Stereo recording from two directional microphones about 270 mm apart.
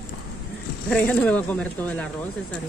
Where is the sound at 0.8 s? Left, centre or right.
Centre.